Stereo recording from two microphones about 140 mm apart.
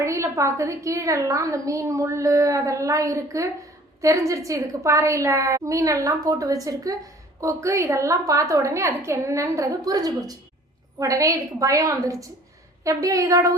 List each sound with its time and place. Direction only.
0.0 s a woman's voice: 20° right (ahead or behind)